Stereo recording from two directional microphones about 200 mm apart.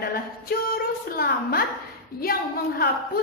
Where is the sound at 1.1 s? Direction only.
50° left (ahead or behind).